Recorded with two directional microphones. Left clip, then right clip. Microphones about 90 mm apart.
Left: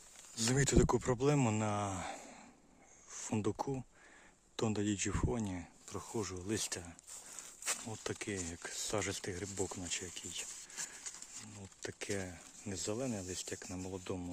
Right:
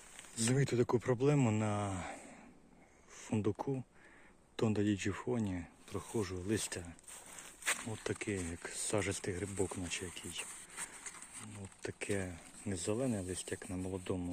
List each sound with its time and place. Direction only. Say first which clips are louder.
0.5 s speech: left 2 dB; 70° left (ahead or behind)
0.9 s speech: right 1 dB; 40° left (ahead or behind)
4.5 s speech: right 2 dB; 25° left (ahead or behind)
8.2 s speech: right 2 dB; 30° left (ahead or behind)
11.5 s speech: right 2 dB; 20° left (ahead or behind)
14.0 s speech: right 3 dB; 20° left (ahead or behind)